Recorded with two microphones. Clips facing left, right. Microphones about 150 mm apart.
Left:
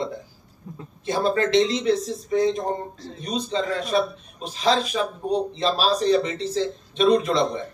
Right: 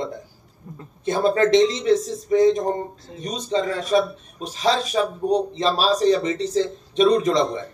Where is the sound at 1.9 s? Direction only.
20° right (ahead or behind).